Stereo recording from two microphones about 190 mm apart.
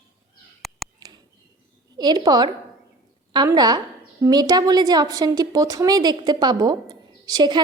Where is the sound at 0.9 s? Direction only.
20° right (ahead or behind).